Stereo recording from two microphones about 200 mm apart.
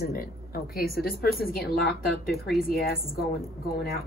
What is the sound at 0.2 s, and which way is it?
Speech, 50° left (ahead or behind).